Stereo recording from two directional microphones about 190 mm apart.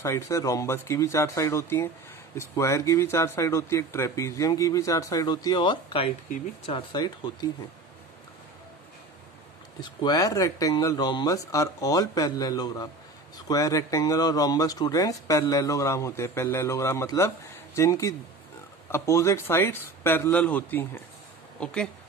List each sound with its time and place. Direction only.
0.0 s speech: 15° left (ahead or behind)
9.8 s speech: 20° left (ahead or behind)